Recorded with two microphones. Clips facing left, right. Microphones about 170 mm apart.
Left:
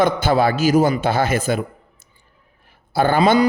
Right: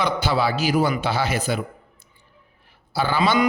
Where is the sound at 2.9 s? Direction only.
50° left (ahead or behind).